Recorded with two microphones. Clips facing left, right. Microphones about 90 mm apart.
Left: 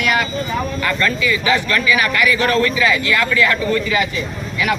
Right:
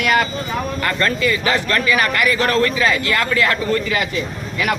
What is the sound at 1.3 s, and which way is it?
Speech, 45° right (ahead or behind).